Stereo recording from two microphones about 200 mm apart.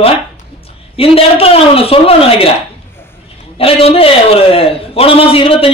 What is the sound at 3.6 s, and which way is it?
A man's voice, 30° left (ahead or behind).